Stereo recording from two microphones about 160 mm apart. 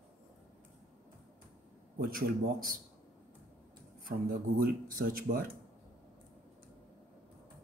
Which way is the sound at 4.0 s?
65° right (ahead or behind).